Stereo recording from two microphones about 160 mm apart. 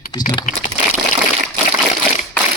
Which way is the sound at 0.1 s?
25° left (ahead or behind).